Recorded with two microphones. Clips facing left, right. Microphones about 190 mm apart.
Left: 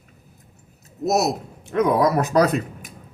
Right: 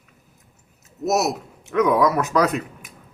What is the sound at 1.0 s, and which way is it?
Speech, 35° left (ahead or behind).